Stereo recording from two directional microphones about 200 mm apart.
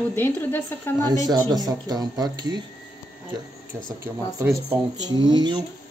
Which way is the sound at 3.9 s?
15° right (ahead or behind).